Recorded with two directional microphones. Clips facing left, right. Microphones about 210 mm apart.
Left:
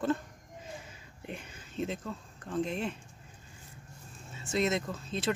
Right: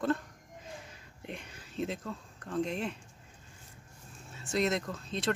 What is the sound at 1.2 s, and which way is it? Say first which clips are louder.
Speech: left 1 dB; centre (ahead or behind).